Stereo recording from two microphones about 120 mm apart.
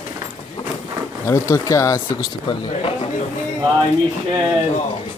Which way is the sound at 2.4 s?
50° left (ahead or behind).